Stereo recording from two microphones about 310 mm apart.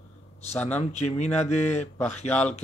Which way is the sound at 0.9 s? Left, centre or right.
Left.